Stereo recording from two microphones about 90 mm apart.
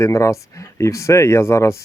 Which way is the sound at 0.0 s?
35° left (ahead or behind).